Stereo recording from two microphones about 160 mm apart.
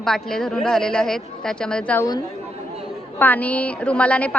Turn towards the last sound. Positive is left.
turn(degrees=10)  # may be behind; listen again after turning